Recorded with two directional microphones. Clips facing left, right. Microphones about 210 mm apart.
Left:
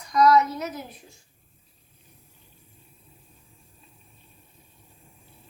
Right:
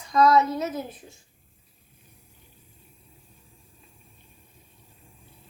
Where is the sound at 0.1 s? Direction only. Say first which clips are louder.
Even; 25° right (ahead or behind).